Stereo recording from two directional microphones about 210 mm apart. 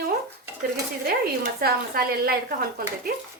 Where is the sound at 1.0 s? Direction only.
45° right (ahead or behind).